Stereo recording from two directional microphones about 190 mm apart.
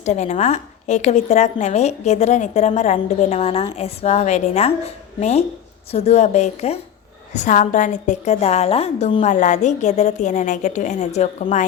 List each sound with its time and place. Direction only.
0.0 s a woman's voice: 35° left (ahead or behind)